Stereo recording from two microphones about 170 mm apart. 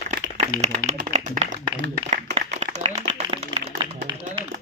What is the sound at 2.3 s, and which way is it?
Clapping, 40° right (ahead or behind).